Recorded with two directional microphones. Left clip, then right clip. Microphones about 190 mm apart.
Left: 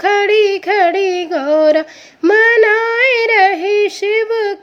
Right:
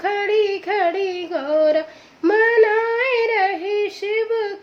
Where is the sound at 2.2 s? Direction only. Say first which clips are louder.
Left 6 dB; 35° left (ahead or behind).